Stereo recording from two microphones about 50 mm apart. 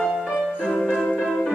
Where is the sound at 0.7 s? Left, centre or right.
Centre.